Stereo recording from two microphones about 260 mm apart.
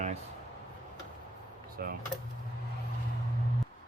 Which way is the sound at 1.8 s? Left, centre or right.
Right.